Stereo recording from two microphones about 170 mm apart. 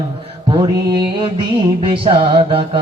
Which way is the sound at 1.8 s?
30° right (ahead or behind).